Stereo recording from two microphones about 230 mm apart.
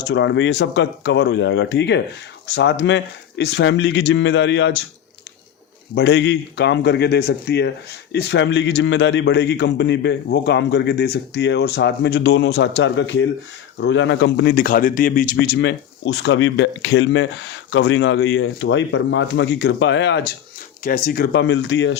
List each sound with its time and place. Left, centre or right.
0.1 s a man's voice: left
5.9 s a man's voice: left
20.8 s a man's voice: left